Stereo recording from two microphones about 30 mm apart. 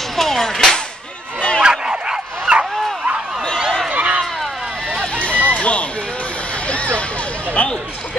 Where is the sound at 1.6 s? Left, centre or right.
Right.